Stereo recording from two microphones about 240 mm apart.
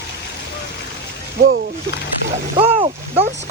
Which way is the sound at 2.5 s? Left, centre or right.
Right.